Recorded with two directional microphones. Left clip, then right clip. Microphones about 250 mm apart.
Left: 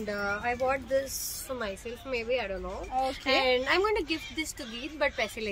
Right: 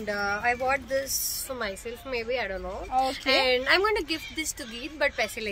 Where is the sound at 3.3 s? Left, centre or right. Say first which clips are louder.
Right 3 dB; centre.